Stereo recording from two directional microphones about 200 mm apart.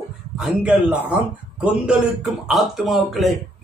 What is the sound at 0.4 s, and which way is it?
A man's voice, 5° right (ahead or behind).